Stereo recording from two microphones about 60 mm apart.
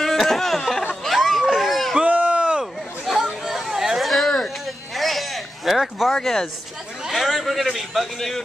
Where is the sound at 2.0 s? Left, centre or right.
Right.